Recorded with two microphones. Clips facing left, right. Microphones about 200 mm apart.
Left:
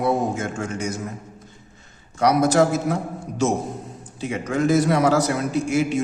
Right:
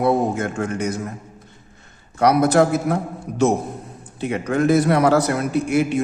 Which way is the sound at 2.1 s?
60° right (ahead or behind).